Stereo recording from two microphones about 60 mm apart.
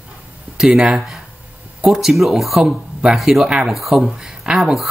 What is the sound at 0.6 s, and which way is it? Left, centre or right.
Speech, centre.